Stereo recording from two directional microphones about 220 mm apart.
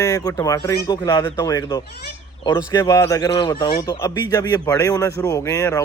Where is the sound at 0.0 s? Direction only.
15° left (ahead or behind).